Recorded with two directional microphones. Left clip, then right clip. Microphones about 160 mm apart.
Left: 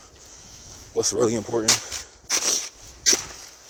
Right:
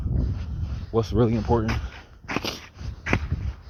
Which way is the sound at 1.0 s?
40° left (ahead or behind).